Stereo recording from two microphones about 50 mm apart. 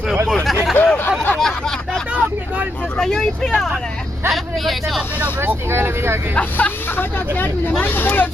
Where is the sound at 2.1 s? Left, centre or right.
Right.